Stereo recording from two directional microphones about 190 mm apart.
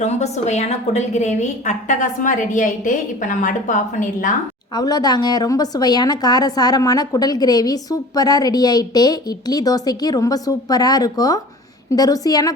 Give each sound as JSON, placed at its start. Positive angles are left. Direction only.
{"t": 0.0, "sound": "a woman's voice", "side_deg": 35}
{"t": 4.7, "sound": "a woman's voice", "side_deg": 20}